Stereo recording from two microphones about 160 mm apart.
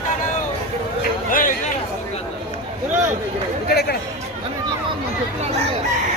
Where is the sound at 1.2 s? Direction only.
55° left (ahead or behind).